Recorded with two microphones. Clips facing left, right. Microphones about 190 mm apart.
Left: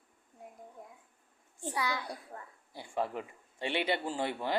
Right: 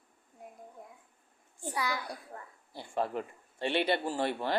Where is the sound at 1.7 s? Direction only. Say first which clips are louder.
Right 1 dB; 25° left (ahead or behind).